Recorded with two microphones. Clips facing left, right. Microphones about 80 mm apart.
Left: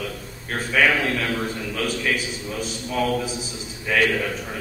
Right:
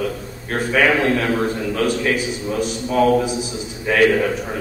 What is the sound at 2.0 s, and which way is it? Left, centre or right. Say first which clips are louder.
A man's voice: right 5 dB; centre.